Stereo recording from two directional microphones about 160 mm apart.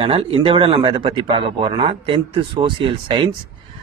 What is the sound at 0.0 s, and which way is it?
Speech, 35° right (ahead or behind).